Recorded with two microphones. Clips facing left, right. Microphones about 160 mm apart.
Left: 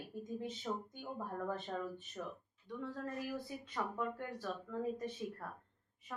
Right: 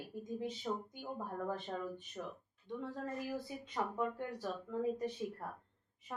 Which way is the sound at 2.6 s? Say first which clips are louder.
Right 1 dB; 25° right (ahead or behind).